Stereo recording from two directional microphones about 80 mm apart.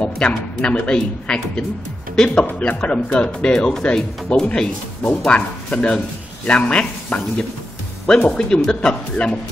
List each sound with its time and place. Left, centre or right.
0.3 s speech: centre
8.5 s speech: centre